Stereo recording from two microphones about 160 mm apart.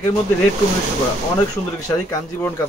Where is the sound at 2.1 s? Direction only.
15° left (ahead or behind).